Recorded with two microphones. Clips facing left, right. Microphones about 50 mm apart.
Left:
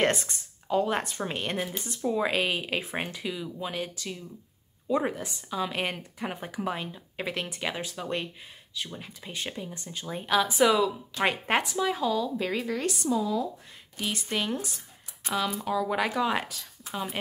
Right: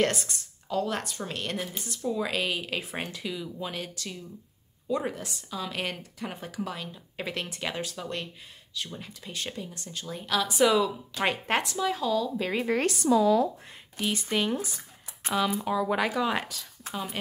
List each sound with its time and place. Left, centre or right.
0.0 s speech: left
7.2 s speech: centre
10.6 s speech: centre
12.8 s speech: right
13.9 s speech: centre